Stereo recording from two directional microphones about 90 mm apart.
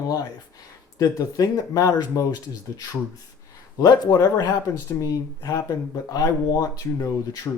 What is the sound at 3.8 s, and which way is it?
Speech, 45° left (ahead or behind).